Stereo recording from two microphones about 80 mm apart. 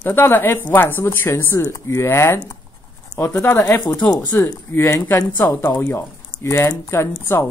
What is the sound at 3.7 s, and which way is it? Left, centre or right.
Speech, left.